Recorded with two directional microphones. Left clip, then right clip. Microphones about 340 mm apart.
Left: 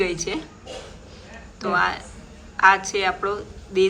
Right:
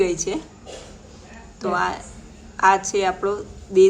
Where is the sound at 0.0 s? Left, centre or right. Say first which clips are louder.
Right 3 dB; centre.